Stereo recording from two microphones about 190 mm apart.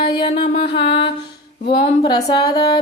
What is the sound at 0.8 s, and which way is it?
Music, 25° left (ahead or behind).